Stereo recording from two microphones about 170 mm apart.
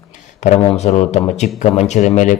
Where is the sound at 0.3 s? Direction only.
45° left (ahead or behind).